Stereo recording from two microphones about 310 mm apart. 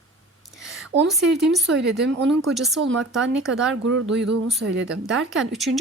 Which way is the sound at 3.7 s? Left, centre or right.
Right.